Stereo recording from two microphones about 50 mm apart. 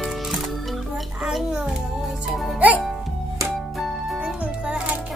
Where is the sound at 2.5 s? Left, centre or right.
Right.